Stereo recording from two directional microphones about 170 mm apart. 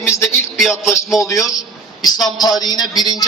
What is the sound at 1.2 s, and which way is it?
A man's voice, 20° left (ahead or behind).